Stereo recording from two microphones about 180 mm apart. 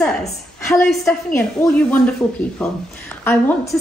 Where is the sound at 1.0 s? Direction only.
15° left (ahead or behind).